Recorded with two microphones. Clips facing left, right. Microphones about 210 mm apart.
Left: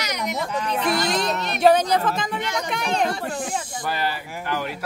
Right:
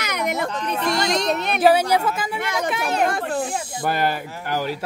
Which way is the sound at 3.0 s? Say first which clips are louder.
Right 3 dB; 50° right (ahead or behind).